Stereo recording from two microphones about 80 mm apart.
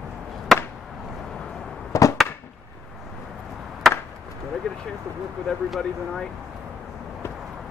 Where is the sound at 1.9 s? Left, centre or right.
Left.